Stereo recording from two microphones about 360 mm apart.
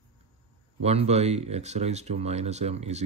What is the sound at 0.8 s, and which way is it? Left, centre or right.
Speech, centre.